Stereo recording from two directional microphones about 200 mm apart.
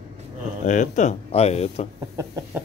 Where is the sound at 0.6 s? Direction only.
40° left (ahead or behind).